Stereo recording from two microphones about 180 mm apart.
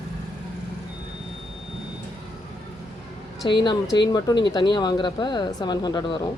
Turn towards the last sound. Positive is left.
turn(degrees=25)  # may be behind; listen again after turning